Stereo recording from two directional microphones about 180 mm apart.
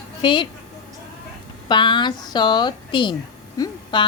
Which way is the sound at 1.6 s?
25° left (ahead or behind).